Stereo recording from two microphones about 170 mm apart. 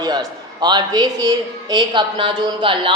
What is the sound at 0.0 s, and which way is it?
A man's voice, 25° right (ahead or behind).